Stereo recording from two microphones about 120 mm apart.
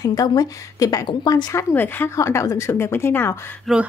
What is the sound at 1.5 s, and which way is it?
Speech, 20° left (ahead or behind).